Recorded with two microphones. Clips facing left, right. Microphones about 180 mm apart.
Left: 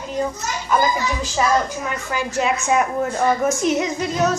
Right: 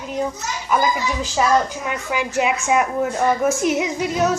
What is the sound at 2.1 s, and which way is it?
A woman's voice, 10° right (ahead or behind).